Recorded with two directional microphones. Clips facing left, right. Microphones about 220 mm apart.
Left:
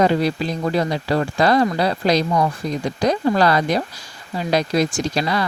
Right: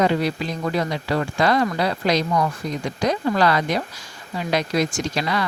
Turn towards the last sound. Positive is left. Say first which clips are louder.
# left 3 dB
turn(degrees=35)  # may be behind; listen again after turning